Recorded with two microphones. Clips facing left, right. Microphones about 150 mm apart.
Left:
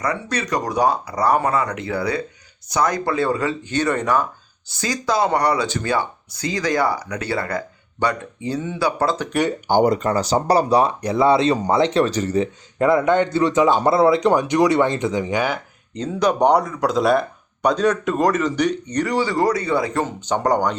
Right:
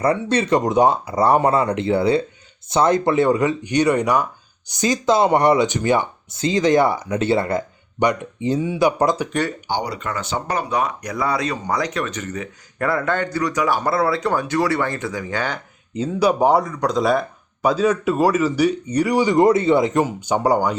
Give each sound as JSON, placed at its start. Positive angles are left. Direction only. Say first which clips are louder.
{"t": 0.0, "sound": "speech", "louder": "right 5 dB", "side_deg": -30}
{"t": 9.6, "sound": "speech", "louder": "left 8 dB", "side_deg": 50}
{"t": 12.8, "sound": "speech", "louder": "left 5 dB", "side_deg": 20}
{"t": 16.0, "sound": "speech", "louder": "right 1 dB", "side_deg": -5}
{"t": 20.1, "sound": "speech", "louder": "right 1 dB", "side_deg": -10}